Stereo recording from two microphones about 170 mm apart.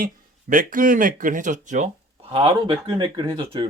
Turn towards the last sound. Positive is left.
turn(degrees=-30)  # may be behind; listen again after turning